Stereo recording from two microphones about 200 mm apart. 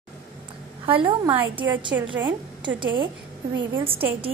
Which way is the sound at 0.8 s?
25° right (ahead or behind).